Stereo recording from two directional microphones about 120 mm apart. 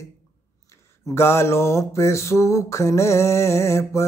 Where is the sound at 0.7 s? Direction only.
25° left (ahead or behind).